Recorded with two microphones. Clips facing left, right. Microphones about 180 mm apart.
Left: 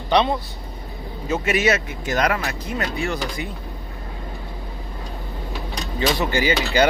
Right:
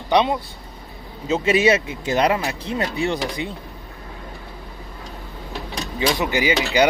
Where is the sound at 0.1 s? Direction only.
15° right (ahead or behind).